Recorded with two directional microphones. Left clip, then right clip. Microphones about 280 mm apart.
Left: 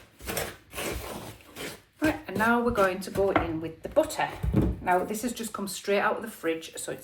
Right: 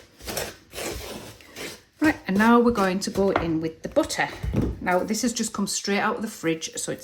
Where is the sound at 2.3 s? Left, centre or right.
Right.